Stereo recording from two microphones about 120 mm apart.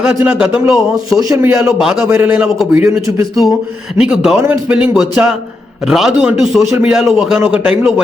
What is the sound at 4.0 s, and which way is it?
A man's voice, 5° right (ahead or behind).